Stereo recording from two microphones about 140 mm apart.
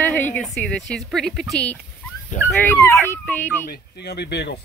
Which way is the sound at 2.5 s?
15° left (ahead or behind).